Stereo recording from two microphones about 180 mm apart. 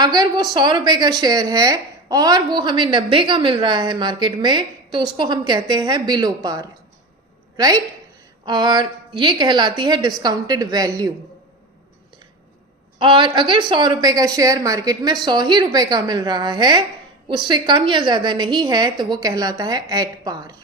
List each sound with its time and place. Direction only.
0.0 s a woman's voice: 20° right (ahead or behind)
13.0 s a woman's voice: 25° right (ahead or behind)